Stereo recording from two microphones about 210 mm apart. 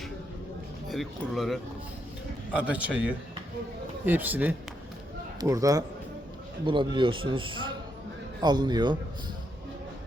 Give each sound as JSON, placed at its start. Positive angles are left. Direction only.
{"t": 0.9, "sound": "a man's voice", "side_deg": 0}